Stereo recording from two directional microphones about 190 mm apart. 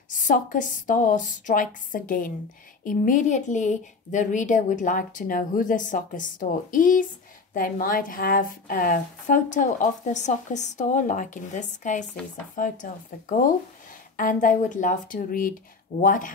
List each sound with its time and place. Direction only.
0.3 s a woman's voice: 45° left (ahead or behind)
14.1 s a woman's voice: 45° left (ahead or behind)